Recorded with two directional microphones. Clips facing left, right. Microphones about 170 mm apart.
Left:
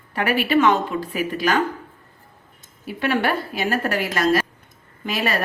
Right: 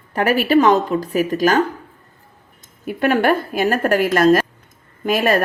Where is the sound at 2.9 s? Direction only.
50° right (ahead or behind).